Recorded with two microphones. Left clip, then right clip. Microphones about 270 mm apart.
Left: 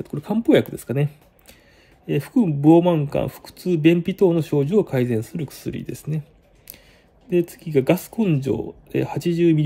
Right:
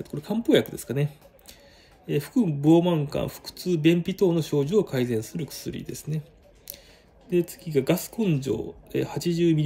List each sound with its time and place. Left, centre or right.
0.0 s speech: centre
7.2 s speech: centre